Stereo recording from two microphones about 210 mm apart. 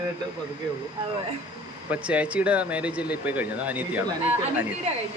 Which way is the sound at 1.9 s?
5° right (ahead or behind).